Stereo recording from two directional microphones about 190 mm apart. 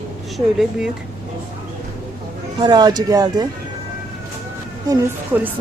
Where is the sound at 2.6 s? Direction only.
20° right (ahead or behind).